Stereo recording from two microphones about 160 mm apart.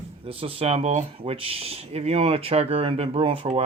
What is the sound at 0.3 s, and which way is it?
Speech, 35° right (ahead or behind).